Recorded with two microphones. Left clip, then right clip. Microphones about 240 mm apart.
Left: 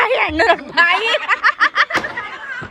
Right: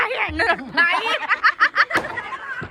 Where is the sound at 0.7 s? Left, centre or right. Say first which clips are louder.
Left 5 dB; centre.